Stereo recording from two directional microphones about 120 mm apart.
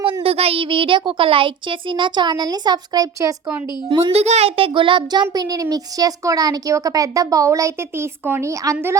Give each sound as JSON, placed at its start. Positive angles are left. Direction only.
{"t": 0.0, "sound": "a child's voice", "side_deg": -50}
{"t": 3.9, "sound": "a child's voice", "side_deg": -55}